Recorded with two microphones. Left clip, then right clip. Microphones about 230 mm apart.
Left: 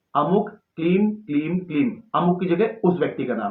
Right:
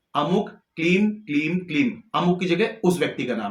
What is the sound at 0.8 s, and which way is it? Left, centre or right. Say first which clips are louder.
Speech: even; right.